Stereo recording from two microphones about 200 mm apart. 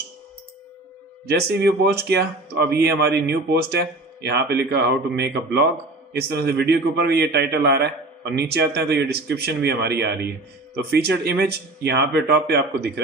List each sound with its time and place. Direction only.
1.3 s speech: 55° right (ahead or behind)